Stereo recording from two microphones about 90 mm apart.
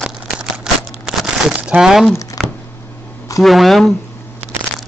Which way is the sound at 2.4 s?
5° right (ahead or behind).